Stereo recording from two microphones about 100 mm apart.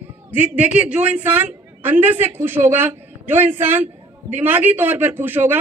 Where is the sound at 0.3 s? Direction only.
15° right (ahead or behind).